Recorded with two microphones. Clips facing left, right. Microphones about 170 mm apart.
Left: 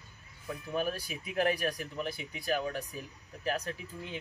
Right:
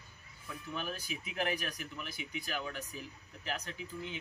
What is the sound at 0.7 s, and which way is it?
Speech, 40° left (ahead or behind).